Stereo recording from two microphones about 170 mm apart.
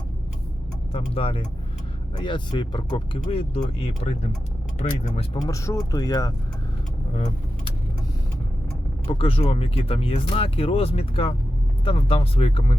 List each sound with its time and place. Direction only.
0.9 s speech: 35° left (ahead or behind)
5.3 s speech: 20° left (ahead or behind)
9.0 s speech: 30° left (ahead or behind)